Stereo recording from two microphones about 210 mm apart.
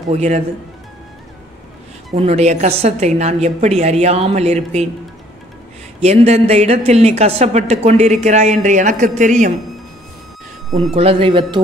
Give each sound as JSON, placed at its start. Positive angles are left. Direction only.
{"t": 0.1, "sound": "a woman's voice", "side_deg": -30}
{"t": 2.1, "sound": "a woman's voice", "side_deg": -30}
{"t": 5.9, "sound": "a woman's voice", "side_deg": -30}
{"t": 11.0, "sound": "speech", "side_deg": -25}